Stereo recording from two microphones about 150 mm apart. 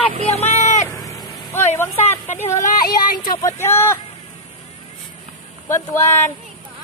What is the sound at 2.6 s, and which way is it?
Speech, 60° left (ahead or behind).